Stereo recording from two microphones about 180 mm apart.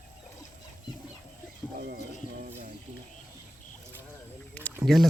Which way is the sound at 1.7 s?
55° right (ahead or behind).